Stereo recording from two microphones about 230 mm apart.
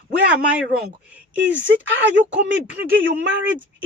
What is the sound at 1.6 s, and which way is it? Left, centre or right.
Speech, right.